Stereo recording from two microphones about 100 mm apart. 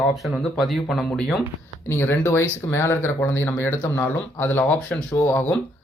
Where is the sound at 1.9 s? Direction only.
25° left (ahead or behind).